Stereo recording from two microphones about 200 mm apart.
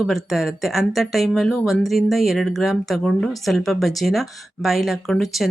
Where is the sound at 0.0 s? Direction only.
Centre (ahead or behind).